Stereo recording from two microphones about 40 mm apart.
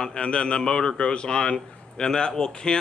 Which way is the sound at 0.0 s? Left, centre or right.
Left.